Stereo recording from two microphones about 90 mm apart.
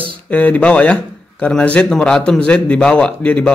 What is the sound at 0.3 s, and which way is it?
Speech, 15° left (ahead or behind).